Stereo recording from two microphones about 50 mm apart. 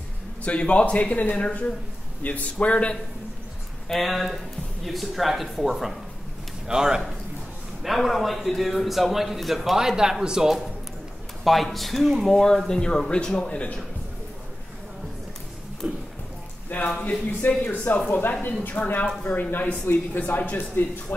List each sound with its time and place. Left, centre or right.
0.4 s a man's voice: left
3.9 s a man's voice: centre
7.8 s a man's voice: centre
11.4 s a man's voice: centre; by 13.7 s left
15.8 s speech: right
16.7 s speech: left
20.8 s speech: left